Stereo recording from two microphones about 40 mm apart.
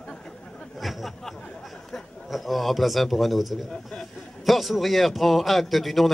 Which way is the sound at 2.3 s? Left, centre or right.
Centre.